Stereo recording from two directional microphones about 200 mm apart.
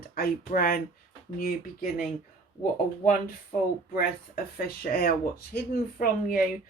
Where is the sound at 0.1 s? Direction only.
45° left (ahead or behind).